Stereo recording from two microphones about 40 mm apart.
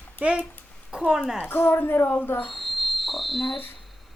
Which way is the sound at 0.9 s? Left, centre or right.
Right.